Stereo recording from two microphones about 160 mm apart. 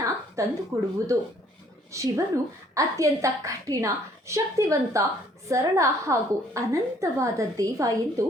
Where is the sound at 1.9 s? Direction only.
20° right (ahead or behind).